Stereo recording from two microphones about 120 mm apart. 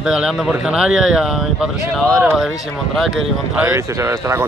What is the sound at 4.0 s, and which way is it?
Speech, 25° right (ahead or behind).